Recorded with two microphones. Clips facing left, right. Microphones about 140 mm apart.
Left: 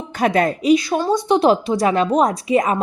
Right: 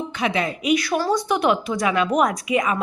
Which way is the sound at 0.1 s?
45° left (ahead or behind).